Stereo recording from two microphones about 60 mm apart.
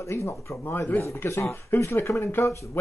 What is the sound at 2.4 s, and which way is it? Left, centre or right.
Speech, left.